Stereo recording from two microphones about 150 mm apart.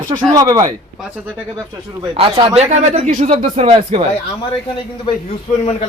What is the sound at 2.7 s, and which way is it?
Speech, 50° right (ahead or behind).